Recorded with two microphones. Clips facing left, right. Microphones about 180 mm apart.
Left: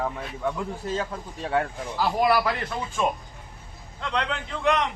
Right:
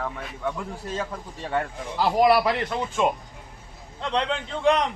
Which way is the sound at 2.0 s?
20° right (ahead or behind).